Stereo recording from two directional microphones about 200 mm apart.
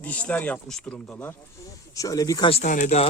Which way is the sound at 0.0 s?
5° left (ahead or behind).